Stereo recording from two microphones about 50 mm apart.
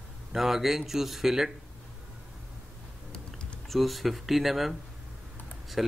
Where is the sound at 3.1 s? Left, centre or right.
Centre.